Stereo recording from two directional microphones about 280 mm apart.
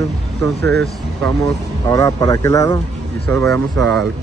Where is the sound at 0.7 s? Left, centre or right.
Centre.